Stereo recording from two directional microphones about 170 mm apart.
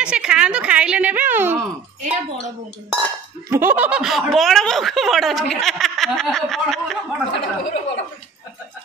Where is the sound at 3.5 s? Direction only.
10° right (ahead or behind).